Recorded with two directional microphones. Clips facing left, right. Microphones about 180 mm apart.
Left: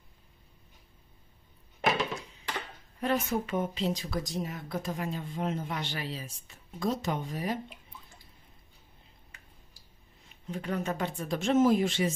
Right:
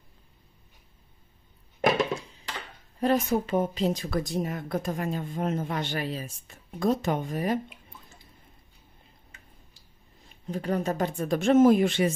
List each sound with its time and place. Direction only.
3.0 s speech: 35° right (ahead or behind); by 7.6 s 50° right (ahead or behind)
10.5 s speech: 35° right (ahead or behind); by 12.1 s 60° right (ahead or behind)